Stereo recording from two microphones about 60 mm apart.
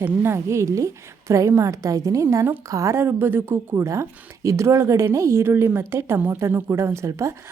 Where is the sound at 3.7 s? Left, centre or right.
Right.